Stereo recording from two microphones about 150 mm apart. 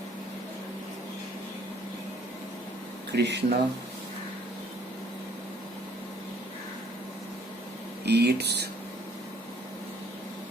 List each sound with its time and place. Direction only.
3.1 s speech: 90° right
8.0 s speech: 90° right